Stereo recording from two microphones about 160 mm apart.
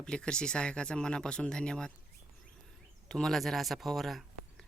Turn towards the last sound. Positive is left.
turn(degrees=0)  # may be behind; listen again after turning